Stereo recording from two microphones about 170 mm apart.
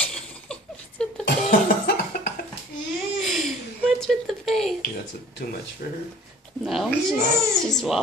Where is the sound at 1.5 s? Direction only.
65° left (ahead or behind).